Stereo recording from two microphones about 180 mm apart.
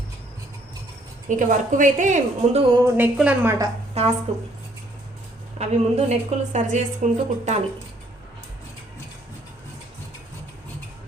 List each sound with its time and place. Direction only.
1.3 s a woman's voice: 45° right (ahead or behind)
2.7 s a woman's voice: 15° right (ahead or behind)
4.0 s a woman's voice: 35° right (ahead or behind)
5.5 s a woman's voice: 40° right (ahead or behind)